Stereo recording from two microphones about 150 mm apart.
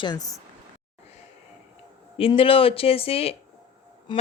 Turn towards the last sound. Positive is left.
turn(degrees=30)  # may be behind; listen again after turning